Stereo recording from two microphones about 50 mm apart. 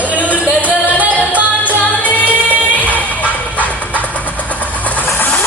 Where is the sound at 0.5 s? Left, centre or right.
Right.